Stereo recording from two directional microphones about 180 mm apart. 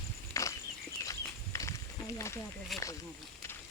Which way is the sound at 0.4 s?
15° left (ahead or behind).